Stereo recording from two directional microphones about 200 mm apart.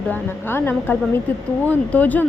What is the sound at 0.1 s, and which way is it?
Speech, 10° left (ahead or behind).